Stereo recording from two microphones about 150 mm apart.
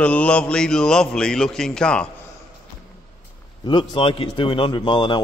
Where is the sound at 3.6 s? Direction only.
35° left (ahead or behind).